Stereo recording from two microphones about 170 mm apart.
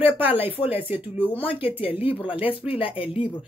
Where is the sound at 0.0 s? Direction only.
10° right (ahead or behind).